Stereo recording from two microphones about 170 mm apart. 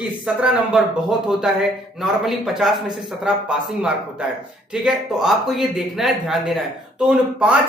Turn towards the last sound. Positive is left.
turn(degrees=-5)  # may be behind; listen again after turning